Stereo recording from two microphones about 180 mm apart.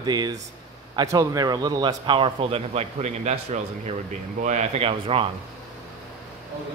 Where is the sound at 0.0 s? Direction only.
20° right (ahead or behind).